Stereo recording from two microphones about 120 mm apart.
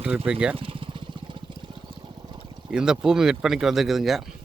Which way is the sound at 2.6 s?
5° right (ahead or behind).